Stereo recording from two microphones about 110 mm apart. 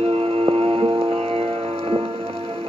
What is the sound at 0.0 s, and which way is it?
Music, 60° right (ahead or behind).